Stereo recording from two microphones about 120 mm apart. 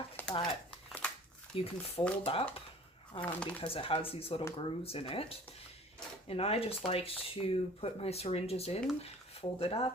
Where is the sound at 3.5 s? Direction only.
50° left (ahead or behind).